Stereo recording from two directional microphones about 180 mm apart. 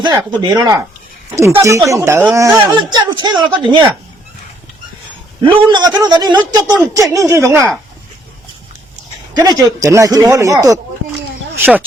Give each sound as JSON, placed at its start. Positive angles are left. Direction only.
{"t": 0.0, "sound": "speech", "side_deg": -25}
{"t": 5.4, "sound": "speech", "side_deg": -25}
{"t": 9.3, "sound": "speech", "side_deg": -20}